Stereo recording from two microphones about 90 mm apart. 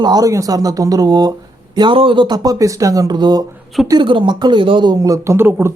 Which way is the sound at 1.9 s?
85° right.